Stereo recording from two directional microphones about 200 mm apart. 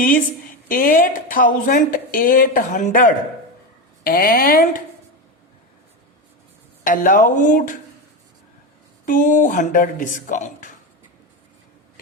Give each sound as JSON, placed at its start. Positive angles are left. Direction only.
{"t": 0.7, "sound": "speech", "side_deg": 45}
{"t": 6.8, "sound": "speech", "side_deg": 45}
{"t": 9.0, "sound": "speech", "side_deg": 40}